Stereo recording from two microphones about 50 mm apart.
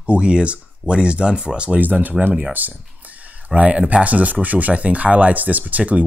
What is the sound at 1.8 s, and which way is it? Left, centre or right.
Speech, right.